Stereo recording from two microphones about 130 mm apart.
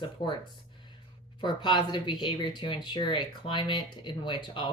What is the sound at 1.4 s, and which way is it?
Speech, 35° left (ahead or behind).